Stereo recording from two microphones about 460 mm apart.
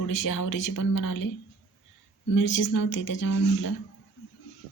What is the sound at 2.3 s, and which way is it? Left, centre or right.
Speech, left.